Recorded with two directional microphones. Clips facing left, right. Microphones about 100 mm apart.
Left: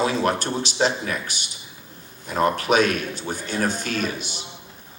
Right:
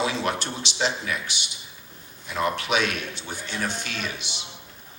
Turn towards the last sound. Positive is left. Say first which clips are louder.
# left 6 dB
turn(degrees=45)  # may be behind; listen again after turning